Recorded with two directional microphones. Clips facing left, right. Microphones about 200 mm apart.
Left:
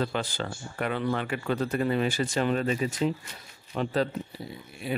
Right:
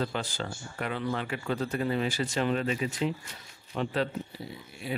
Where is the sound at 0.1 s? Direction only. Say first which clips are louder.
Left 3 dB; 65° left (ahead or behind); by 4.1 s 40° left (ahead or behind).